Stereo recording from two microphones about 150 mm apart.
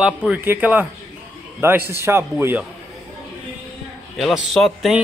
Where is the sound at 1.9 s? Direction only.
15° right (ahead or behind).